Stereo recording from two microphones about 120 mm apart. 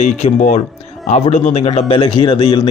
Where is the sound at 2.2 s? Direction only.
40° left (ahead or behind).